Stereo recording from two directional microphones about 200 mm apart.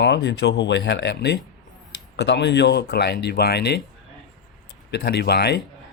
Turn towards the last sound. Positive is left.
turn(degrees=55)  # may be behind; listen again after turning